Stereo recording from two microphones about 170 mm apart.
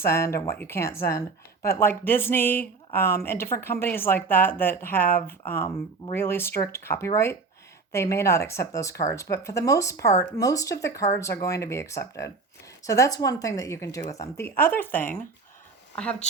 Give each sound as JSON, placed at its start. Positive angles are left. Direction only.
{"t": 0.0, "sound": "a woman's voice", "side_deg": 15}